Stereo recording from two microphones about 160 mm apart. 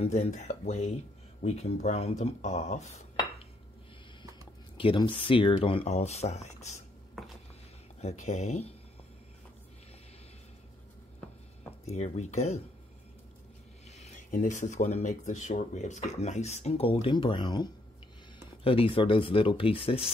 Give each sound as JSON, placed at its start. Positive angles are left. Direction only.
{"t": 0.0, "sound": "speech", "side_deg": 45}
{"t": 4.7, "sound": "speech", "side_deg": 30}
{"t": 8.0, "sound": "speech", "side_deg": 45}
{"t": 11.8, "sound": "speech", "side_deg": 45}
{"t": 13.8, "sound": "speech", "side_deg": 45}